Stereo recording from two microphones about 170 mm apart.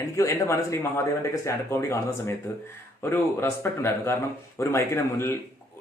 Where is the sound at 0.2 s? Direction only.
15° left (ahead or behind).